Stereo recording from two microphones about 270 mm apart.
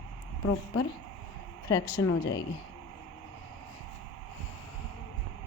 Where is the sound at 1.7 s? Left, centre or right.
Centre.